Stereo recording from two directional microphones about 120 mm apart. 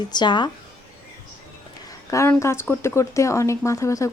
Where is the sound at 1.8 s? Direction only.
30° left (ahead or behind).